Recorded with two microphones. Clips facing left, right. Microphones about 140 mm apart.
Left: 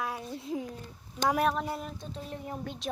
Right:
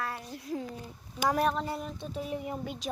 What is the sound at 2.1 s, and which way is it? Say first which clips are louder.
Speech: right 7 dB; 10° right (ahead or behind).